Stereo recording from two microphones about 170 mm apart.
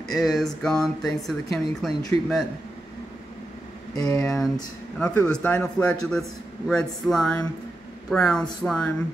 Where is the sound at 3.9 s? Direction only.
20° left (ahead or behind).